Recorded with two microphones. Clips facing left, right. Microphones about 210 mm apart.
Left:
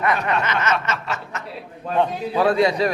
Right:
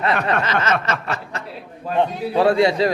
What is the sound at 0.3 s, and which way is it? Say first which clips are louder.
Speech: right 1 dB; 55° right (ahead or behind).